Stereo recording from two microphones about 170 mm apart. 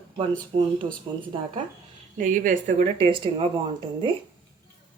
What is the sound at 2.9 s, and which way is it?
Speech, 30° right (ahead or behind).